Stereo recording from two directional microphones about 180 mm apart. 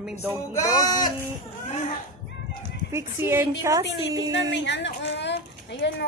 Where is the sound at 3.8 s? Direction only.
75° left (ahead or behind).